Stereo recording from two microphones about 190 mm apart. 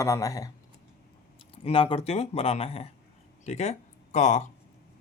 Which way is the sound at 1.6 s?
30° left (ahead or behind).